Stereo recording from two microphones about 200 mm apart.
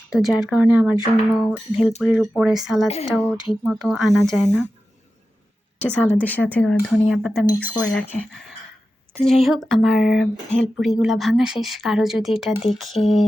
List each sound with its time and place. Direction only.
0.1 s speech: centre (ahead or behind)
2.8 s speech: 30° left (ahead or behind)
3.1 s speech: centre (ahead or behind)
5.8 s speech: 10° left (ahead or behind); by 7.9 s 10° right (ahead or behind)
8.2 s speech: centre (ahead or behind)